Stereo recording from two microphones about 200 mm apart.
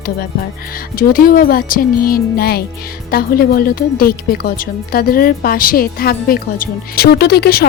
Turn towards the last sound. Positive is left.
turn(degrees=55)  # may be behind; listen again after turning